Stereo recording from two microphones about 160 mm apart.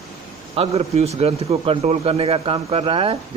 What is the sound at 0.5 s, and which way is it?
A man's voice, 40° right (ahead or behind).